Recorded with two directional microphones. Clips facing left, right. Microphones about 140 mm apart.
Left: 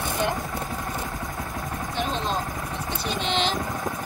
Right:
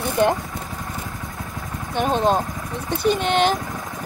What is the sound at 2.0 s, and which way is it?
Speech, 55° right (ahead or behind).